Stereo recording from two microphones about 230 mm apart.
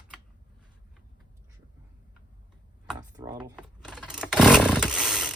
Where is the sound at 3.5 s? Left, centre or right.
Centre.